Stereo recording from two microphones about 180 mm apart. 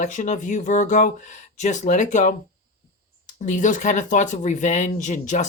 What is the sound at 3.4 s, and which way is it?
Speech, 45° left (ahead or behind).